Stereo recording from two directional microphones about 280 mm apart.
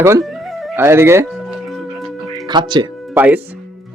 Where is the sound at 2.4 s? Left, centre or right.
Centre.